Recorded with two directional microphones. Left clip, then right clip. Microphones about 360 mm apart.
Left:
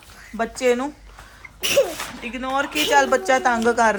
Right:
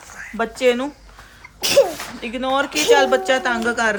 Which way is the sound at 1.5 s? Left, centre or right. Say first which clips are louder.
Right 4 dB; right.